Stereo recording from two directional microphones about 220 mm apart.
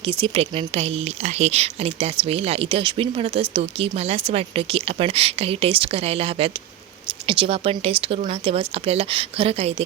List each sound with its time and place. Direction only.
0.0 s speech: 25° right (ahead or behind)